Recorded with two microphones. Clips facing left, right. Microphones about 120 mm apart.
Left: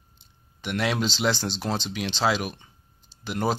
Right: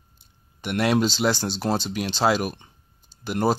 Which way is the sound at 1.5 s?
45° right (ahead or behind).